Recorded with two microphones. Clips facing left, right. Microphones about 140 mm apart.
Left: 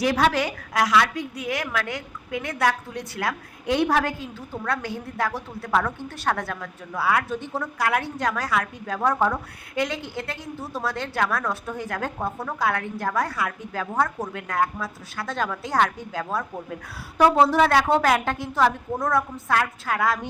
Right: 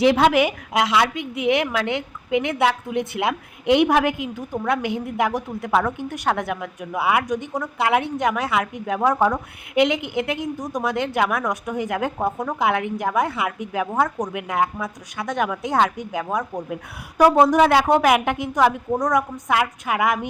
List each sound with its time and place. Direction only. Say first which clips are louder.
0.0 s a woman's voice: right 5 dB; 20° right (ahead or behind)